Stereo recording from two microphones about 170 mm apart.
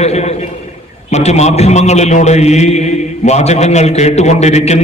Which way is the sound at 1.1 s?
40° left (ahead or behind).